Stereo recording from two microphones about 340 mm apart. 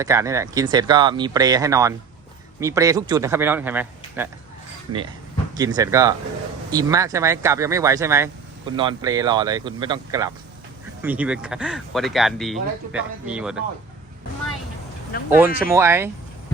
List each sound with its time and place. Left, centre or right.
0.0 s speech: centre
5.5 s speech: centre
15.1 s speech: left
15.6 s speech: centre